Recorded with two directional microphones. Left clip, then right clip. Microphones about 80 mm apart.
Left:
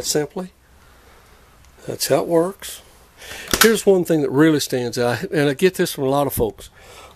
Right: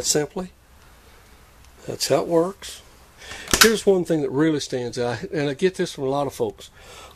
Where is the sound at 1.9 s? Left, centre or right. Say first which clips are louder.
Left 2 dB; left.